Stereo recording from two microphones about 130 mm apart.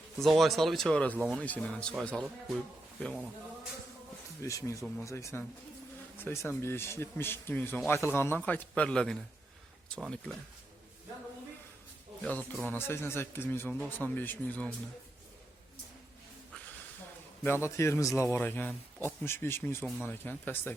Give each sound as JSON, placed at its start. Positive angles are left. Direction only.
{"t": 0.2, "sound": "speech", "side_deg": 0}
{"t": 4.4, "sound": "a man's voice", "side_deg": 25}
{"t": 12.2, "sound": "speech", "side_deg": 10}
{"t": 17.4, "sound": "a man's voice", "side_deg": 20}